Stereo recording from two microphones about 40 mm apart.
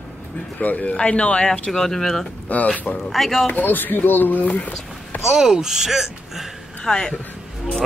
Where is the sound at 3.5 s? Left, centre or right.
Left.